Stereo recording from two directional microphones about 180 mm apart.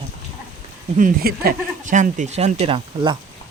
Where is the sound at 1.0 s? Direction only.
55° right (ahead or behind).